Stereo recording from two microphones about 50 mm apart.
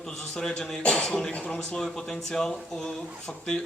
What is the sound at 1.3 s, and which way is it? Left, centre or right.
Speech, left.